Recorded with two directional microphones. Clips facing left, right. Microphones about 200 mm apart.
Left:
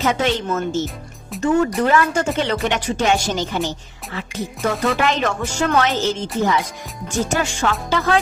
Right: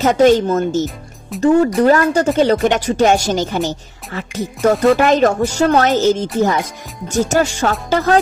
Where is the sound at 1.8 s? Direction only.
35° right (ahead or behind).